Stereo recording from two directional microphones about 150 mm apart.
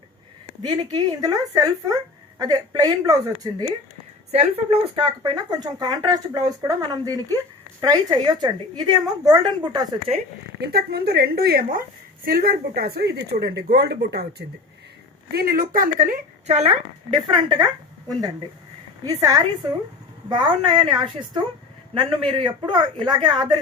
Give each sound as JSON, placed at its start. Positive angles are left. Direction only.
{"t": 0.6, "sound": "speech", "side_deg": -30}
{"t": 4.3, "sound": "speech", "side_deg": -40}
{"t": 10.6, "sound": "a woman's voice", "side_deg": -90}
{"t": 17.2, "sound": "speech", "side_deg": -30}
{"t": 19.0, "sound": "speech", "side_deg": -25}